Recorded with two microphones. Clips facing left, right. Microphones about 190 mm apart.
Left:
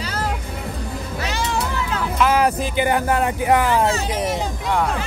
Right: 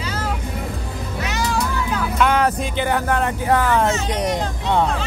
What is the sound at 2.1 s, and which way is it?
Speech, 5° left (ahead or behind).